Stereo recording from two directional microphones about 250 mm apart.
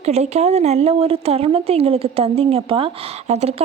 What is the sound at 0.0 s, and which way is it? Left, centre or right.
Speech, right.